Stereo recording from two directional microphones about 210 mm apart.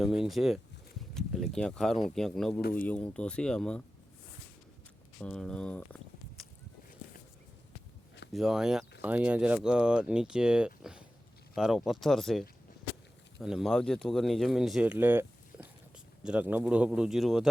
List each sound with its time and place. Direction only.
0.0 s speech: centre (ahead or behind)
2.6 s speech: 45° left (ahead or behind)
2.8 s speech: 5° left (ahead or behind)
5.2 s speech: 5° left (ahead or behind)
8.3 s speech: centre (ahead or behind)